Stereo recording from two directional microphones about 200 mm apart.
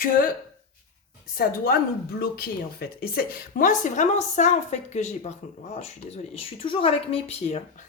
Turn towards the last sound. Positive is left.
turn(degrees=30)  # may be behind; listen again after turning